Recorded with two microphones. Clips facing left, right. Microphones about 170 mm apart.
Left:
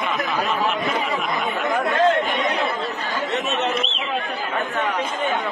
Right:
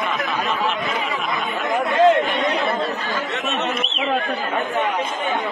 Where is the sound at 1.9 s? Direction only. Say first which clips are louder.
Right 4 dB; 20° right (ahead or behind).